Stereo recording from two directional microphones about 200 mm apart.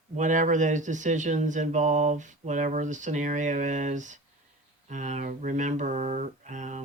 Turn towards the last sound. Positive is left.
turn(degrees=-40)  # may be behind; listen again after turning